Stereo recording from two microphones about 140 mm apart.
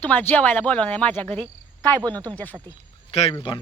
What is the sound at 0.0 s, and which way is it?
Speech, 15° left (ahead or behind).